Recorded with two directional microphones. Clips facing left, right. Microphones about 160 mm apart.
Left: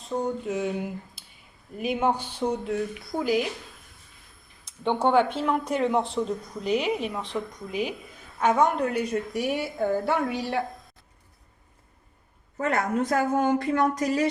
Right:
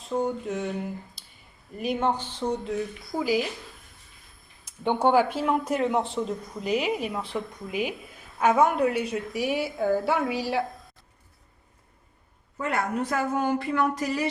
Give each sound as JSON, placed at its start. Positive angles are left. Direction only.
{"t": 0.1, "sound": "speech", "side_deg": 0}
{"t": 4.6, "sound": "speech", "side_deg": -5}
{"t": 12.5, "sound": "a woman's voice", "side_deg": 45}